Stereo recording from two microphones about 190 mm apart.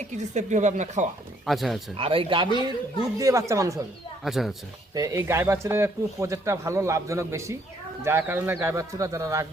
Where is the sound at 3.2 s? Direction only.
15° right (ahead or behind).